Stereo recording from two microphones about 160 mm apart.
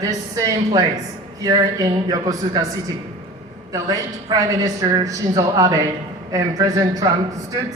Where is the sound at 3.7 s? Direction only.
20° right (ahead or behind).